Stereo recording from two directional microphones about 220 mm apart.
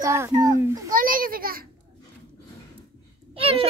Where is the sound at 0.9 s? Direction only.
40° right (ahead or behind).